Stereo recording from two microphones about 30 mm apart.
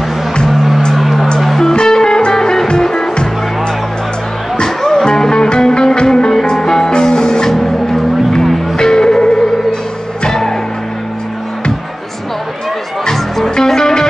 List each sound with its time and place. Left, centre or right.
0.5 s music: centre
1.8 s music: left
4.6 s music: centre
13.1 s music: centre